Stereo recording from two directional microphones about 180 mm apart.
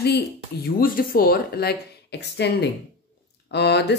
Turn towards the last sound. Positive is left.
turn(degrees=70)  # may be behind; listen again after turning